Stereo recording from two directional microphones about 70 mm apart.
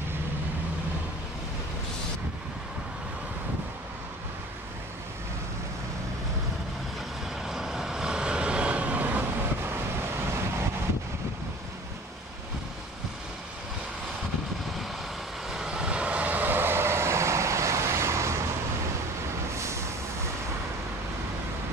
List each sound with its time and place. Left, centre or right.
7.4 s vehicle: centre; by 9.2 s right
15.5 s vehicle: centre; by 18.4 s right
19.5 s vehicle: right